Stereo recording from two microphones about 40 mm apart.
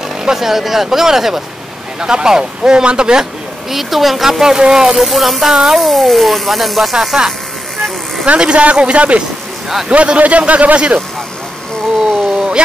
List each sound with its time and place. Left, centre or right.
0.2 s speech: centre
2.0 s speech: right
3.7 s speech: centre
4.9 s speech: centre
5.9 s speech: centre
8.3 s speech: right
12.4 s a sound: right